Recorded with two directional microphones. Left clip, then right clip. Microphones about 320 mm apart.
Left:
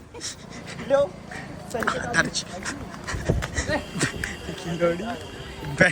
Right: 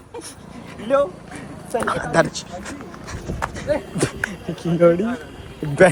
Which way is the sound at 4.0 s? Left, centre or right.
Centre.